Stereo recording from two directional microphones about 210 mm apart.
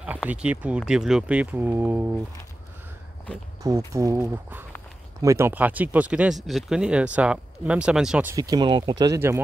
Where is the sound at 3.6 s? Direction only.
15° right (ahead or behind).